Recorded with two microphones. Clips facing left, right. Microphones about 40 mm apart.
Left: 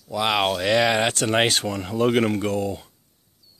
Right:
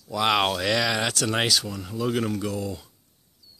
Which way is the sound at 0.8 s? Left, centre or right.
Left.